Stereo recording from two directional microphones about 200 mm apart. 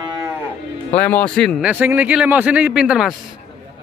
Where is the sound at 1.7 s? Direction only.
10° right (ahead or behind).